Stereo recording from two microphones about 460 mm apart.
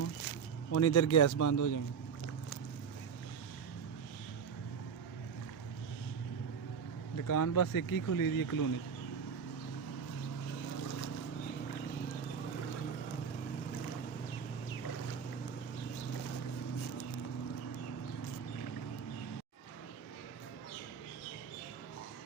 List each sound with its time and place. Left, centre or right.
0.7 s speech: left
7.3 s speech: left